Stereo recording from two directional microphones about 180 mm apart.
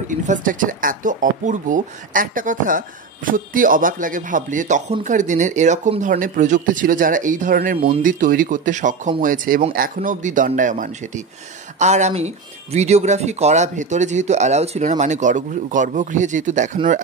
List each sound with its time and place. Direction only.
0.3 s speech: 45° right (ahead or behind)